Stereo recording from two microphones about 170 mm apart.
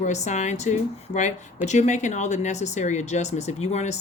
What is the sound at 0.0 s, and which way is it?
Speech, 45° left (ahead or behind).